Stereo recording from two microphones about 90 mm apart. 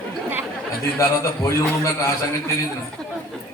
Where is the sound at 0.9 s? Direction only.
30° left (ahead or behind).